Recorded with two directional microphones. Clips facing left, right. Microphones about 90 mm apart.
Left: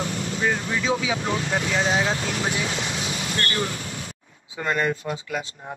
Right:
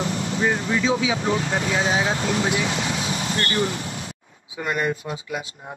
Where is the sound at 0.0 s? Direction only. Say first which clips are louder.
Right 2 dB; 30° right (ahead or behind).